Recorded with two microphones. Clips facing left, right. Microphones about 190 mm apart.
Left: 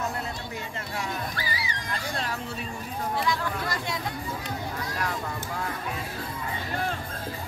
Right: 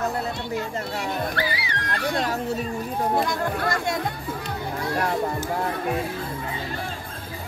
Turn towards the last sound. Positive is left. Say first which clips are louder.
# right 7 dB
turn(degrees=-45)  # may be behind; listen again after turning